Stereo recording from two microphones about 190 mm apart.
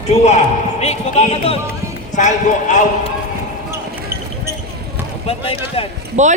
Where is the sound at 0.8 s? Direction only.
35° left (ahead or behind).